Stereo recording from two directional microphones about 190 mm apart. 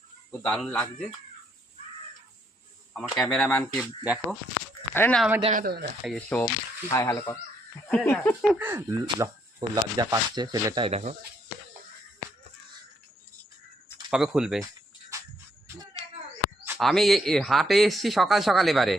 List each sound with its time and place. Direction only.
0.3 s speech: 5° left (ahead or behind)
2.9 s speech: centre (ahead or behind)
4.9 s speech: 5° left (ahead or behind)
5.5 s speech: 50° right (ahead or behind)
6.1 s speech: 5° left (ahead or behind)
8.5 s speech: 10° right (ahead or behind); by 11.2 s 35° right (ahead or behind)
14.1 s speech: 5° right (ahead or behind)
15.1 s music: 15° right (ahead or behind)
15.6 s a sound: 20° right (ahead or behind)
16.6 s speech: centre (ahead or behind)